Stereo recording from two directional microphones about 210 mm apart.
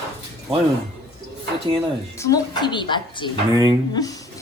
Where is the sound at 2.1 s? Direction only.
15° left (ahead or behind).